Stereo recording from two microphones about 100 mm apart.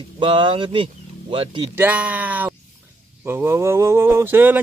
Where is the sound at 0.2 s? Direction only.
55° right (ahead or behind).